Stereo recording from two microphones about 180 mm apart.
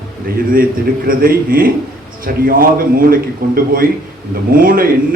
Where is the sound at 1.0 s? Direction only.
55° right (ahead or behind).